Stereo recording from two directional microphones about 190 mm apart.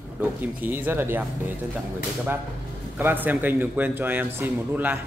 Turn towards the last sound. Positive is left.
turn(degrees=-10)  # may be behind; listen again after turning